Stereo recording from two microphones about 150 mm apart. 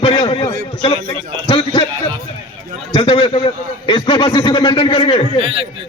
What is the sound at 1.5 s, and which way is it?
Speech, 35° left (ahead or behind).